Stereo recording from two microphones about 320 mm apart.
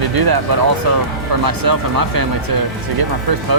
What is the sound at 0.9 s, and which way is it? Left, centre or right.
Speech, right.